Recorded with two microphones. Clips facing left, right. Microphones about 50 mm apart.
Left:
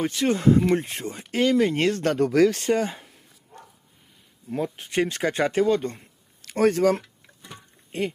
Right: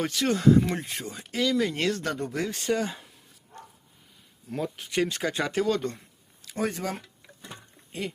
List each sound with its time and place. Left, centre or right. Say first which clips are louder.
0.1 s speech: left 3 dB; left
0.4 s speech: left 1 dB; left
2.1 s speech: left 12 dB; left
2.5 s speech: left 4 dB; left
4.4 s speech: left 4 dB; left
6.4 s speech: left 10 dB; left